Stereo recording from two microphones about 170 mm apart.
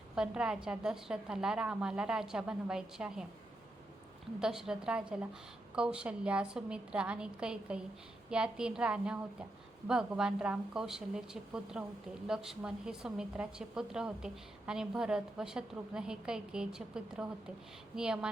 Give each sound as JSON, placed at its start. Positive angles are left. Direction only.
{"t": 0.2, "sound": "a woman's voice", "side_deg": -5}
{"t": 4.4, "sound": "a woman's voice", "side_deg": -5}